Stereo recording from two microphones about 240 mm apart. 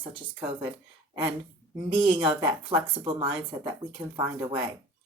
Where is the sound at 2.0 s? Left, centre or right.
Right.